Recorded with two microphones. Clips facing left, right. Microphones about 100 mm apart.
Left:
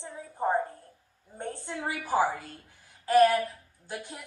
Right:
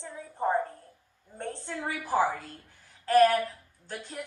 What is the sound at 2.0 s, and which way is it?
A woman's voice, 5° left (ahead or behind).